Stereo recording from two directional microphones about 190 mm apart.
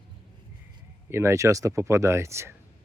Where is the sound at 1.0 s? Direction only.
15° right (ahead or behind).